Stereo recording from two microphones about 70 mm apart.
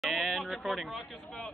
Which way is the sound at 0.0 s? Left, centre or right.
Centre.